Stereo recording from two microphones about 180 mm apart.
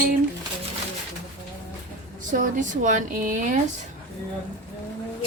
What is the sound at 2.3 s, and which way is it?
Speech, 45° right (ahead or behind).